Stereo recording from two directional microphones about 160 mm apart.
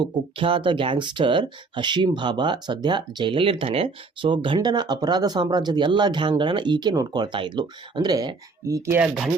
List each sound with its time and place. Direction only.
0.0 s speech: 35° right (ahead or behind)